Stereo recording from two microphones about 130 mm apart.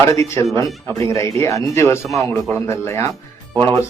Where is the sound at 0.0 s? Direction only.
20° left (ahead or behind).